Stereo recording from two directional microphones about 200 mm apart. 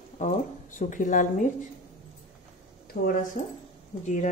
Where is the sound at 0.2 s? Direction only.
40° left (ahead or behind).